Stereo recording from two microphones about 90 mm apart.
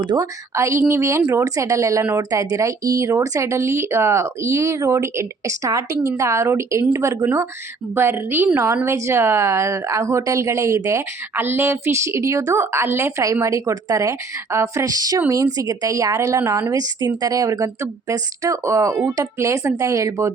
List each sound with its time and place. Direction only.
0.0 s a woman's voice: 60° right (ahead or behind)
0.5 s a woman's voice: 30° right (ahead or behind)